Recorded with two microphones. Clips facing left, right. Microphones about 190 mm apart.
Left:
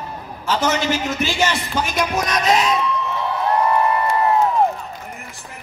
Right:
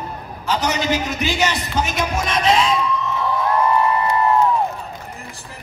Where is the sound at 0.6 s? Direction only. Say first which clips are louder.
Left 1 dB; 15° right (ahead or behind).